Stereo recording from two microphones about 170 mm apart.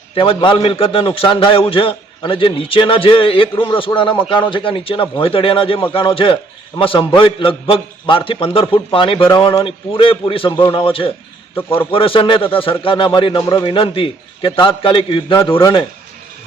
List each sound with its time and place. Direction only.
0.1 s a man's voice: 30° left (ahead or behind)